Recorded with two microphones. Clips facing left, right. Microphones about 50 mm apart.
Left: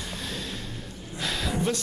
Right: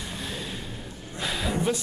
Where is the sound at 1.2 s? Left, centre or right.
Centre.